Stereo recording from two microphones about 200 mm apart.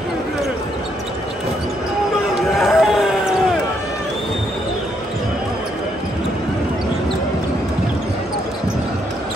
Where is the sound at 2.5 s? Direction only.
Centre (ahead or behind).